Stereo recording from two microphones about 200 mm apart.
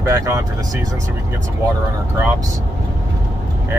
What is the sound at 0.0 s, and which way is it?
Speech, 15° right (ahead or behind).